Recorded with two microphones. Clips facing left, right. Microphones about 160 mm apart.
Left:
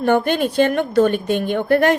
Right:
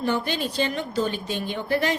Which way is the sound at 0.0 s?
55° left (ahead or behind).